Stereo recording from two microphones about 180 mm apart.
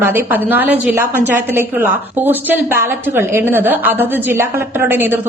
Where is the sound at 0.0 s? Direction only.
10° right (ahead or behind).